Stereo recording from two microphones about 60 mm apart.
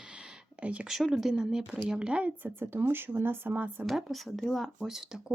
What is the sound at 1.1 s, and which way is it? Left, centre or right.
Speech, centre.